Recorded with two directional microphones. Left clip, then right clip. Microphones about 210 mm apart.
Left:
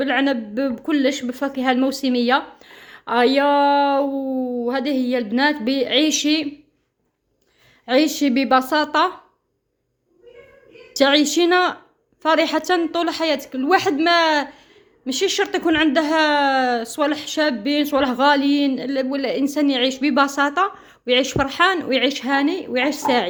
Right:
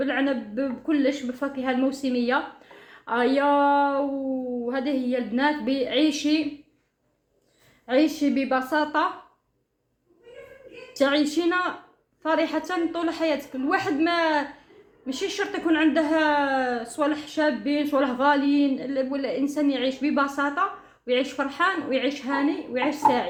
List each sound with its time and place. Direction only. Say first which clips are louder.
0.0 s a woman's voice: left 5 dB; 50° left (ahead or behind)
7.9 s a woman's voice: left 4 dB; 50° left (ahead or behind)
10.9 s a woman's voice: left 6 dB; 45° left (ahead or behind)